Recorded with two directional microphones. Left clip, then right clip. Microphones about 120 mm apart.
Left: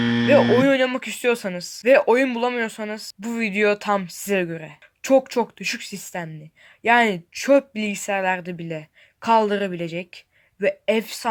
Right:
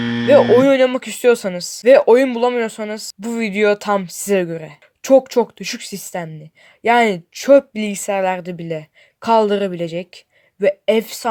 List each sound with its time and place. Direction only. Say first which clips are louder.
0.0 s hoot: right 5 dB; centre (ahead or behind)
0.6 s speech: right 6 dB; 25° right (ahead or behind)